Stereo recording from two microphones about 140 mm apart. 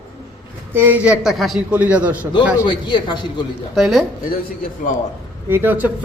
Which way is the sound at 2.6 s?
35° left (ahead or behind).